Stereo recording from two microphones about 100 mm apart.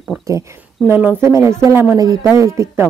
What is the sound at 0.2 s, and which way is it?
Speech, 30° right (ahead or behind).